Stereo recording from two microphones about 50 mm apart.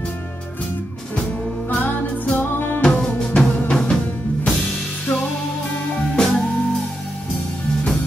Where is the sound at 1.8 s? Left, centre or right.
Left.